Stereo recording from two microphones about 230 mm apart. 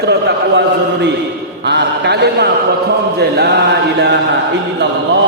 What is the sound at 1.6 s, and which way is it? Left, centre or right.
A man's voice, right.